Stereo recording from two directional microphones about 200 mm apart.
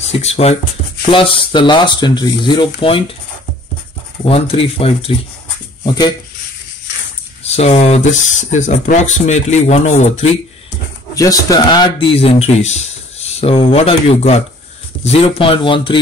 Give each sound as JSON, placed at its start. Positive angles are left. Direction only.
{"t": 0.0, "sound": "speech", "side_deg": 30}
{"t": 4.2, "sound": "speech", "side_deg": 30}
{"t": 7.4, "sound": "speech", "side_deg": 30}
{"t": 11.1, "sound": "speech", "side_deg": 20}